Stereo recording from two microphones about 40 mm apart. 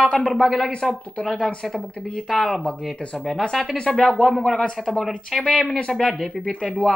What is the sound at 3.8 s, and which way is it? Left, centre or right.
Speech, left.